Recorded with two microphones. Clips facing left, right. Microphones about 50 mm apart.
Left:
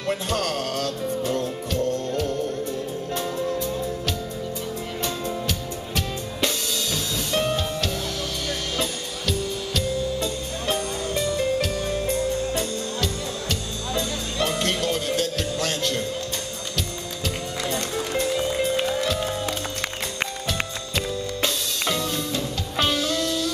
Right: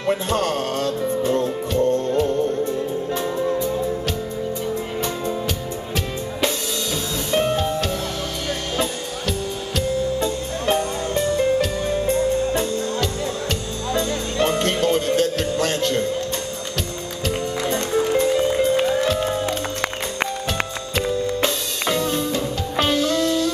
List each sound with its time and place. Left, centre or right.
0.3 s music: right
5.0 s music: centre
7.2 s music: centre
9.8 s music: right
11.3 s music: centre
13.9 s music: centre
15.6 s music: right
17.7 s music: centre
20.9 s music: centre